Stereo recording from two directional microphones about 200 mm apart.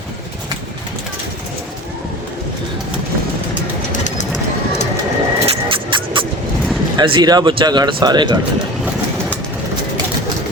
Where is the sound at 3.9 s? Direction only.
35° left (ahead or behind).